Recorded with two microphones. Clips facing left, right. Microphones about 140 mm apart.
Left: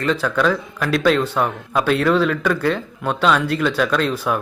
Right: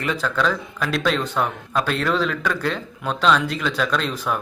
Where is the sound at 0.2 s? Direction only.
5° left (ahead or behind).